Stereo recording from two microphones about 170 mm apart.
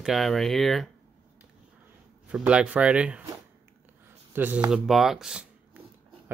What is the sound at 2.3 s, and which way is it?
Speech, 5° right (ahead or behind).